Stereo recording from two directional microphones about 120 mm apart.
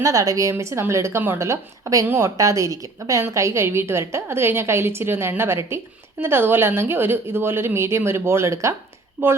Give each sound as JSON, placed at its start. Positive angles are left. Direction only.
{"t": 0.0, "sound": "a woman's voice", "side_deg": -30}